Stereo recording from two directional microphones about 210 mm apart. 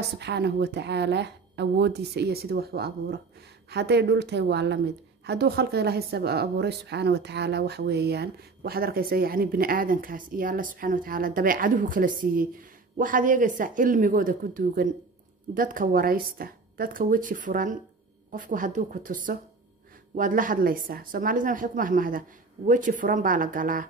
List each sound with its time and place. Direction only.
0.2 s a woman's voice: 50° right (ahead or behind)